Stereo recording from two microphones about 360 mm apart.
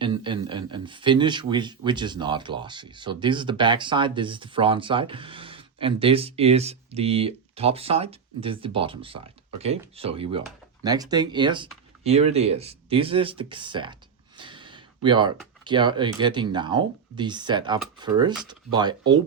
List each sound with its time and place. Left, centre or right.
0.0 s speech: centre
14.3 s a sound: centre
15.6 s speech: centre